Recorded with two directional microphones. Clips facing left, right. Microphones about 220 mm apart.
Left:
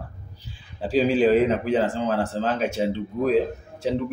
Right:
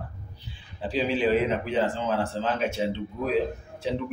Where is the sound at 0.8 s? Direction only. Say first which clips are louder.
Left 6 dB; 40° left (ahead or behind).